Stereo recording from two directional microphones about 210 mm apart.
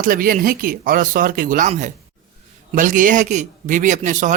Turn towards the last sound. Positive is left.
turn(degrees=-35)  # may be behind; listen again after turning